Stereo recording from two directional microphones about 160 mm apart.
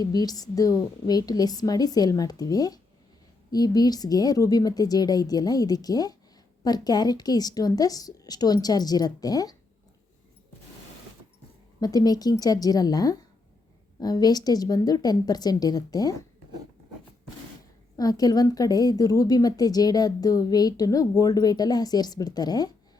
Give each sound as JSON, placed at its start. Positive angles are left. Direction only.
{"t": 0.0, "sound": "a woman's voice", "side_deg": 25}
{"t": 11.8, "sound": "a woman's voice", "side_deg": 25}
{"t": 17.9, "sound": "a woman's voice", "side_deg": 25}